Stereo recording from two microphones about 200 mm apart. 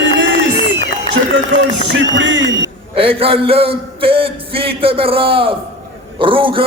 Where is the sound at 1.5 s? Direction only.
70° right (ahead or behind).